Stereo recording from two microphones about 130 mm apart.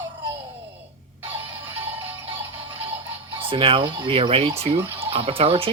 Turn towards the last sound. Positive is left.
turn(degrees=-45)  # may be behind; listen again after turning